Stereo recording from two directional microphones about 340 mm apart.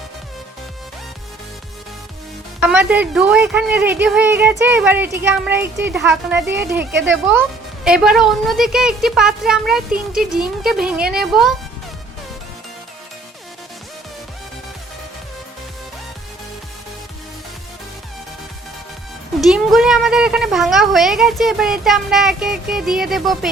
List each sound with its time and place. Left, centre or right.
2.6 s a woman's voice: centre
6.9 s speech: right
7.9 s a woman's voice: centre
9.9 s speech: right
10.3 s a woman's voice: centre
19.4 s a woman's voice: centre